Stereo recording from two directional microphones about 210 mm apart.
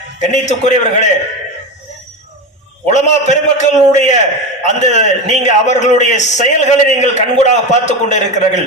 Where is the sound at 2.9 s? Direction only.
35° left (ahead or behind).